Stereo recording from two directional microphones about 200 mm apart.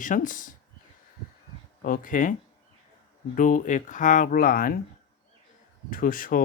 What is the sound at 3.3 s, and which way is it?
Speech, 40° left (ahead or behind).